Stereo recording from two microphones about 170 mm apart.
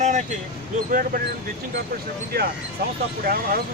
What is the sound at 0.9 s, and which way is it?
Speech, 55° right (ahead or behind).